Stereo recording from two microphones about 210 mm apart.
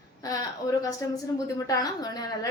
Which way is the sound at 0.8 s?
15° left (ahead or behind).